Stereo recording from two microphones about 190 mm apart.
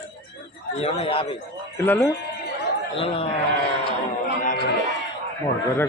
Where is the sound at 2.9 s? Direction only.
30° left (ahead or behind).